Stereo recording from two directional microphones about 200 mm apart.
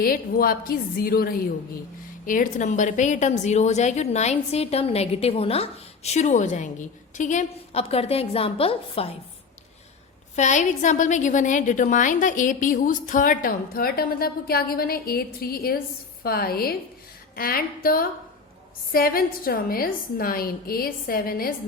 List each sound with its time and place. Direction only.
0.0 s a woman's voice: 45° left (ahead or behind); by 9.1 s 30° left (ahead or behind)
10.3 s a woman's voice: 35° left (ahead or behind)